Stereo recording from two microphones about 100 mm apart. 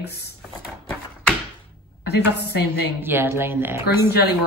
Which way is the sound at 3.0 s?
20° right (ahead or behind).